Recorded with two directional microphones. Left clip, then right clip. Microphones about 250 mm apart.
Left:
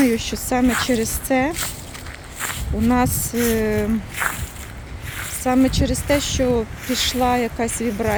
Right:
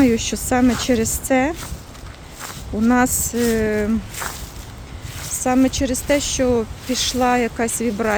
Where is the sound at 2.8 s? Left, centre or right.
Centre.